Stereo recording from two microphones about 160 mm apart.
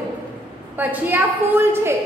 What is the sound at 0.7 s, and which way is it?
A woman's voice, 10° right (ahead or behind).